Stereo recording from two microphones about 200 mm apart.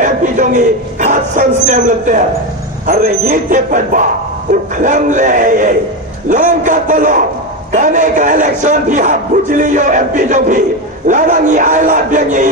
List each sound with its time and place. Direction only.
0.0 s a man's voice: 40° right (ahead or behind)